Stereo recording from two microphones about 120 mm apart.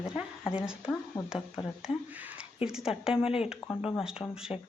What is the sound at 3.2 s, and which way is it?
Speech, 55° left (ahead or behind).